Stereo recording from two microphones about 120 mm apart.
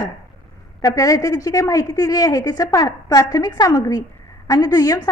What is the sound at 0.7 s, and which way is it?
A woman's voice, 30° left (ahead or behind).